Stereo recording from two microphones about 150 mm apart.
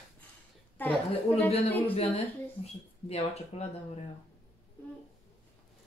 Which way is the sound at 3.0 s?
45° left (ahead or behind).